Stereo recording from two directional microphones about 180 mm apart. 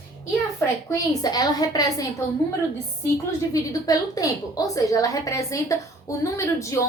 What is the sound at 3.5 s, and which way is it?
A woman's voice, 20° left (ahead or behind).